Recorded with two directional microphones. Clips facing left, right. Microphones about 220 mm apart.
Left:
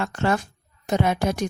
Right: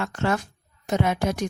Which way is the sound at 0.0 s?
30° left (ahead or behind).